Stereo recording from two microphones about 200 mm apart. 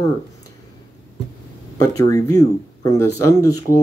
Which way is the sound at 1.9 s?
15° left (ahead or behind).